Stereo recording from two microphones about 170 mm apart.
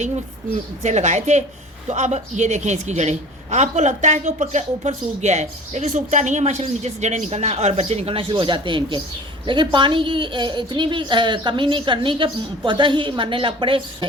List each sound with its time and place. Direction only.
0.8 s a woman's voice: 40° right (ahead or behind)